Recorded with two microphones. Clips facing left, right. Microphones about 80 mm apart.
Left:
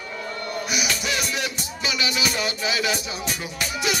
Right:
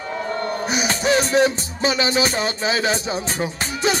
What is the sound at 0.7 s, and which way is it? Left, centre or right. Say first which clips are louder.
Music: right 8 dB; right.